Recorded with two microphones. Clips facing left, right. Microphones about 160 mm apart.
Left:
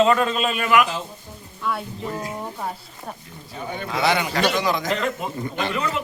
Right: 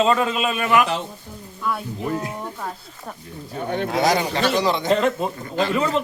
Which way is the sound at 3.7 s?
55° right (ahead or behind).